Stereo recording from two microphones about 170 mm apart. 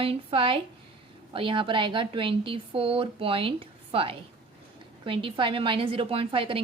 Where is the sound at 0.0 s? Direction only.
35° right (ahead or behind).